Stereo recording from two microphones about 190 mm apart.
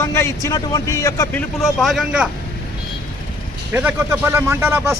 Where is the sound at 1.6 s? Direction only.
Centre (ahead or behind).